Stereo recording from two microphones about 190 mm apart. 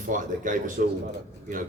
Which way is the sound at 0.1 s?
45° right (ahead or behind).